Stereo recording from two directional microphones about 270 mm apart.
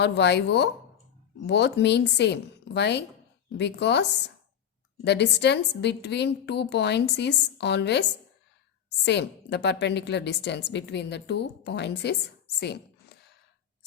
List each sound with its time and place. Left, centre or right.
0.0 s a woman's voice: left
5.0 s a woman's voice: left
9.0 s a woman's voice: left